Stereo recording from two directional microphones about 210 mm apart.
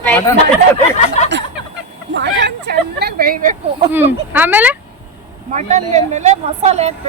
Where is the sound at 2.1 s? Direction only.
55° right (ahead or behind).